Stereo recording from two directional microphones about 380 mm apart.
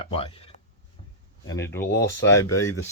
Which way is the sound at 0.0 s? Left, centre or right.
Centre.